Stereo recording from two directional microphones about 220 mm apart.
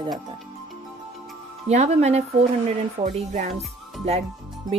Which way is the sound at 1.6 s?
30° right (ahead or behind).